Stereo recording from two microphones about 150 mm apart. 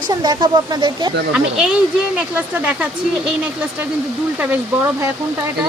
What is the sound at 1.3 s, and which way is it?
Speech, 5° right (ahead or behind).